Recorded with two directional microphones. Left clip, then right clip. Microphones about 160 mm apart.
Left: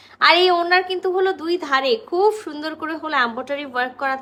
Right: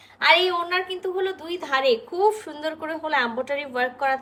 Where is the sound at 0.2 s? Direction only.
35° left (ahead or behind).